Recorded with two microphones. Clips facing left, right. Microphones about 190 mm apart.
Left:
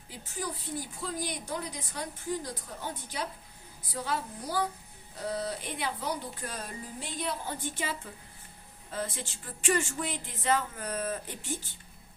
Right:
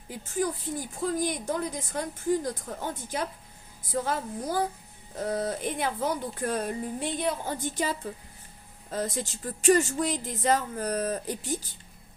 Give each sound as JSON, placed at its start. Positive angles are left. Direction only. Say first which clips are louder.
{"t": 0.1, "sound": "a woman's voice", "louder": "right 9 dB", "side_deg": -50}